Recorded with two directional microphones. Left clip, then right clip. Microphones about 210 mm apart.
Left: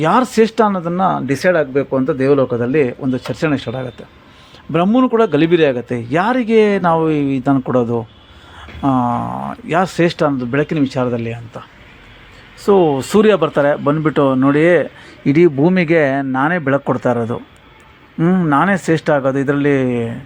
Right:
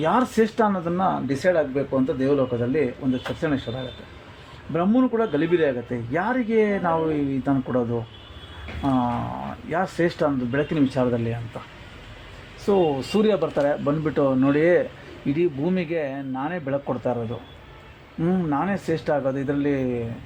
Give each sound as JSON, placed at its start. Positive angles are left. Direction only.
{"t": 0.0, "sound": "a man's voice", "side_deg": 25}
{"t": 12.8, "sound": "speech", "side_deg": 35}
{"t": 13.2, "sound": "a man's voice", "side_deg": 20}
{"t": 15.4, "sound": "a man's voice", "side_deg": 35}